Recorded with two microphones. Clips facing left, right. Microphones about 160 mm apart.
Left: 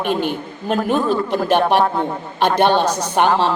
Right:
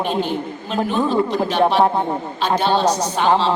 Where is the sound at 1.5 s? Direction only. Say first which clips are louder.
Left 3 dB; 55° left (ahead or behind).